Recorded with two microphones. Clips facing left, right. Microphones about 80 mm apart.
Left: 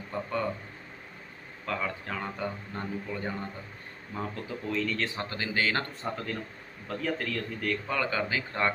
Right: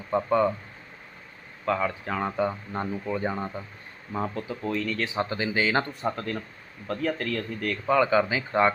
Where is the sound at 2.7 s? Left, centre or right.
Right.